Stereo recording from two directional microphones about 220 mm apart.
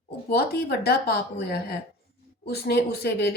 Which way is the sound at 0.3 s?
45° left (ahead or behind).